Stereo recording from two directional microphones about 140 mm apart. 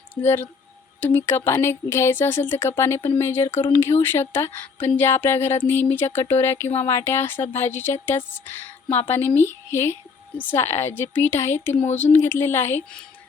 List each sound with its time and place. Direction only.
0.1 s a woman's voice: 15° left (ahead or behind)